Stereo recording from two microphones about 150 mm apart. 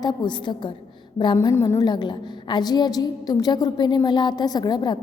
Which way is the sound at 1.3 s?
20° left (ahead or behind).